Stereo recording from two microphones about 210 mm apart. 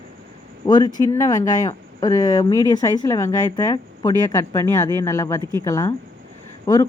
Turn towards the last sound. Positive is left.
turn(degrees=15)  # may be behind; listen again after turning